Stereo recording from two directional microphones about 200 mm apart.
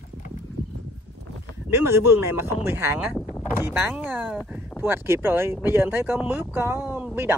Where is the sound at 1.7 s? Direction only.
10° right (ahead or behind).